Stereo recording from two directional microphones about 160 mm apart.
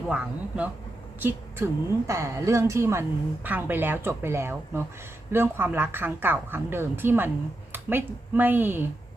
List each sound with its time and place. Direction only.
0.1 s a woman's voice: 10° right (ahead or behind)